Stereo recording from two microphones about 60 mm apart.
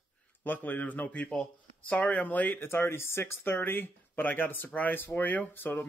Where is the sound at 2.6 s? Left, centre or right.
Left.